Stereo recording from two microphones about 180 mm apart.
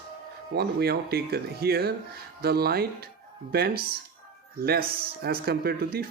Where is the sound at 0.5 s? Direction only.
60° right (ahead or behind).